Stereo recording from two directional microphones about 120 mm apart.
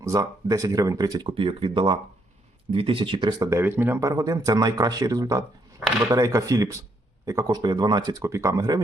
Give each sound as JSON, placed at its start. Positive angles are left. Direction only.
{"t": 0.0, "sound": "speech", "side_deg": -30}
{"t": 3.6, "sound": "speech", "side_deg": -20}